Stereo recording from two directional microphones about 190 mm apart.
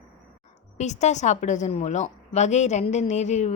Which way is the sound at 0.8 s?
35° left (ahead or behind).